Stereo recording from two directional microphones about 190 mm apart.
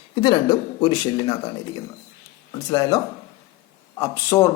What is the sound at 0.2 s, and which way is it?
A man's voice, 25° left (ahead or behind).